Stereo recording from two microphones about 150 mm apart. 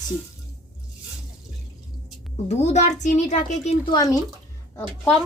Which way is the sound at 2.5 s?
50° left (ahead or behind).